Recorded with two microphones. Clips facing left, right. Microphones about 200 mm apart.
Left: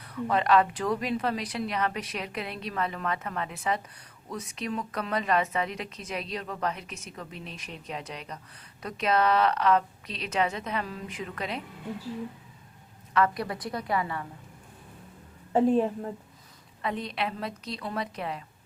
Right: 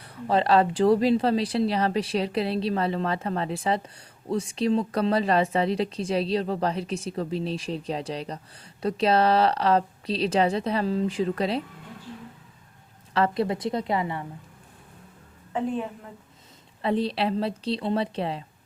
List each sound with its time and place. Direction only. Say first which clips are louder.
0.0 s a woman's voice: right 3 dB; 30° right (ahead or behind)
13.1 s a woman's voice: right 3 dB; 25° right (ahead or behind)
15.5 s a woman's voice: left 6 dB; 35° left (ahead or behind)
16.8 s a woman's voice: right 7 dB; 30° right (ahead or behind)